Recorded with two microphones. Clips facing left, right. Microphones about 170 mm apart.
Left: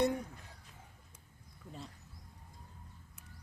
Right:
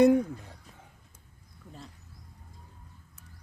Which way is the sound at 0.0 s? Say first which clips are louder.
Right 12 dB; 90° right.